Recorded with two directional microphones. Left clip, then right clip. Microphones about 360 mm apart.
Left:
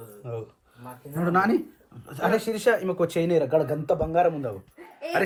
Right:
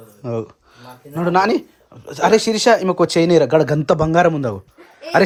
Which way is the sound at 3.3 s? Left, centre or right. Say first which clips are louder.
Right 8 dB; right.